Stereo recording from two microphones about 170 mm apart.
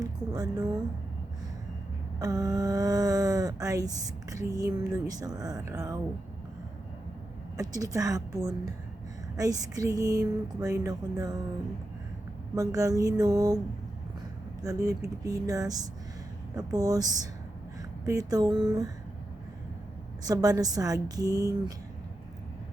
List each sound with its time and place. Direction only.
0.0 s a sound: 20° right (ahead or behind)
2.1 s speech: 20° right (ahead or behind)
7.5 s speech: 20° right (ahead or behind)
12.5 s speech: 20° right (ahead or behind)
14.6 s speech: 20° right (ahead or behind)
20.2 s speech: 20° right (ahead or behind)